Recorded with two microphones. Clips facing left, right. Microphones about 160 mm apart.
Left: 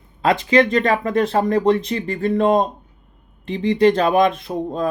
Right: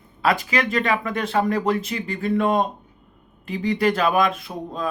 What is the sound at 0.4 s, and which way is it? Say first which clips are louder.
Speech: left 7 dB; 30° left (ahead or behind).